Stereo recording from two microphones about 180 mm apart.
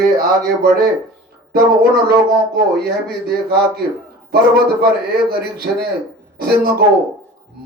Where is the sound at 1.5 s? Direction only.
60° right (ahead or behind).